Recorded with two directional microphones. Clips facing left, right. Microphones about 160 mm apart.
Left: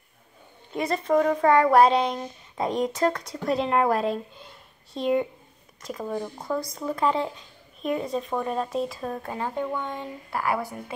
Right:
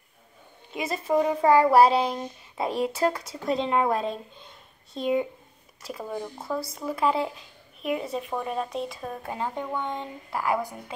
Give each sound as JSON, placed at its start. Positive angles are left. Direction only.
{"t": 0.7, "sound": "speech", "side_deg": -5}
{"t": 9.2, "sound": "speech", "side_deg": -15}